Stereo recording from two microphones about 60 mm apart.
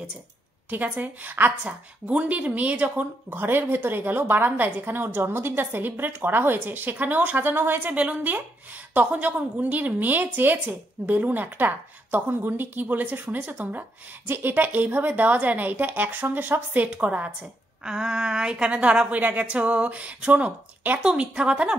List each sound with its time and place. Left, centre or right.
0.7 s a woman's voice: right
17.8 s a woman's voice: centre